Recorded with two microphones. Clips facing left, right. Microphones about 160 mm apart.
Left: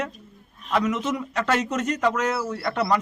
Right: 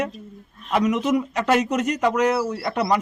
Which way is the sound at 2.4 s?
30° right (ahead or behind).